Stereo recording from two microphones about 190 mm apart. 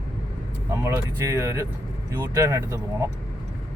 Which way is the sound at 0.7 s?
15° right (ahead or behind).